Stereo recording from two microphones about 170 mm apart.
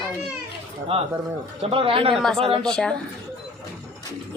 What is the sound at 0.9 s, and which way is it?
Speech, 35° right (ahead or behind).